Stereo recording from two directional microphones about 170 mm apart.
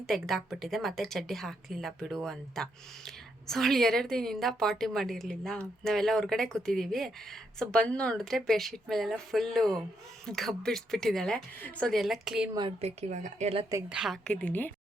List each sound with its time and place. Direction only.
0.0 s a woman's voice: centre (ahead or behind)
12.5 s speech: 35° right (ahead or behind)
13.9 s a woman's voice: 5° right (ahead or behind)
14.3 s a woman's voice: 10° left (ahead or behind)